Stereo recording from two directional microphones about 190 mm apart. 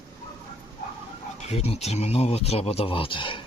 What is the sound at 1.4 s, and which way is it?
Speech, 35° left (ahead or behind).